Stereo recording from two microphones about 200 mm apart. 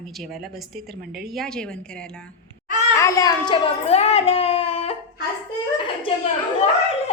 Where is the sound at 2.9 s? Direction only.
15° left (ahead or behind).